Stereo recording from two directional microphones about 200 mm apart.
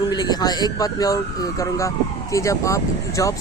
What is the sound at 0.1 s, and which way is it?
Speech, 20° left (ahead or behind).